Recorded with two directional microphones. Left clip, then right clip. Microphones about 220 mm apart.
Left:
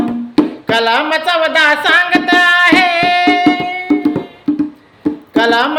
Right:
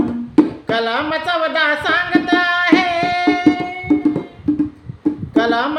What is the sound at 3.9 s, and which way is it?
Music, 20° left (ahead or behind).